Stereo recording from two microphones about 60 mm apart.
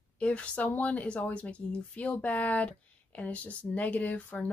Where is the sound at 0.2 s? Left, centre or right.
Left.